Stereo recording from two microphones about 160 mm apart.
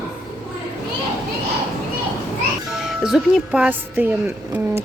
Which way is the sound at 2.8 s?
5° right (ahead or behind).